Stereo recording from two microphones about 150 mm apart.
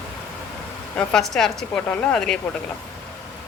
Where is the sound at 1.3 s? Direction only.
5° left (ahead or behind).